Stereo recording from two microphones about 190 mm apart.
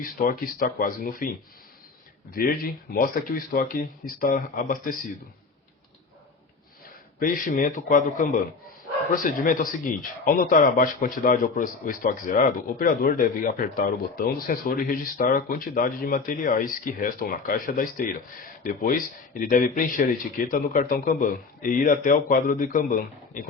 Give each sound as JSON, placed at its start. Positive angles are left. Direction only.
{"t": 0.0, "sound": "speech", "side_deg": 50}
{"t": 2.3, "sound": "speech", "side_deg": 50}
{"t": 7.2, "sound": "speech", "side_deg": 45}